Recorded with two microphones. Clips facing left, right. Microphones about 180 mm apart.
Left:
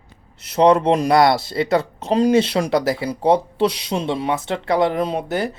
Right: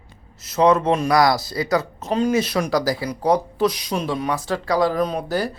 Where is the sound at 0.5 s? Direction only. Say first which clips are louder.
Left 2 dB; 30° left (ahead or behind).